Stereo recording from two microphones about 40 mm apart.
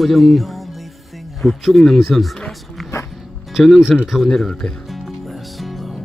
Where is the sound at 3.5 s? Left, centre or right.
Centre.